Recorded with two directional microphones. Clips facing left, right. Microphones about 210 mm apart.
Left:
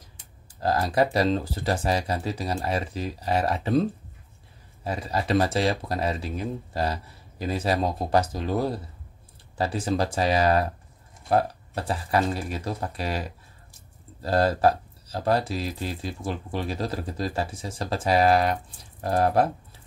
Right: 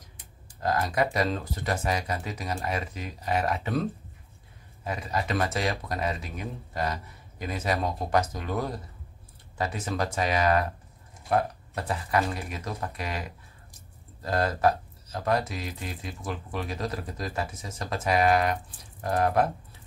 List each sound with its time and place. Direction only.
0.6 s speech: 35° left (ahead or behind)
4.8 s speech: 30° left (ahead or behind)